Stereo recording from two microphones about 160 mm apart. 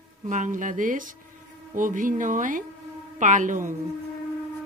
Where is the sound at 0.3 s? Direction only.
55° right (ahead or behind).